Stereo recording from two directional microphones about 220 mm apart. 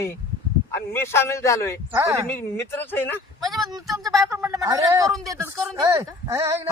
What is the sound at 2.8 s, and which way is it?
Speech, 10° left (ahead or behind).